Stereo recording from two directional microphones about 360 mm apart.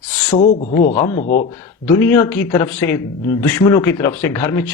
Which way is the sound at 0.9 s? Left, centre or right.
Left.